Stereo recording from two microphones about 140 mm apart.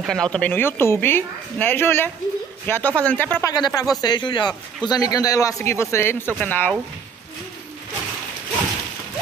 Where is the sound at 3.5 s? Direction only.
30° left (ahead or behind).